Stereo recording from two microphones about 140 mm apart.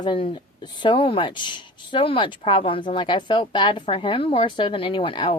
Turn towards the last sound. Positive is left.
turn(degrees=40)  # may be behind; listen again after turning